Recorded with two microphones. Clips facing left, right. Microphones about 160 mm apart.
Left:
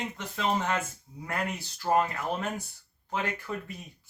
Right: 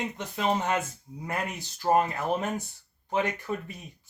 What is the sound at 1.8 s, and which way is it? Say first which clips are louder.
Speech: right 2 dB; 35° right (ahead or behind).